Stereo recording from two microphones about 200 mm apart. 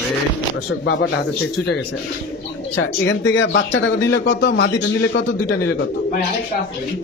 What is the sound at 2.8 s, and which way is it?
Speech, 65° left (ahead or behind).